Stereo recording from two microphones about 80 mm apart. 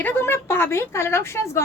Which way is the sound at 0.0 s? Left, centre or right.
Left.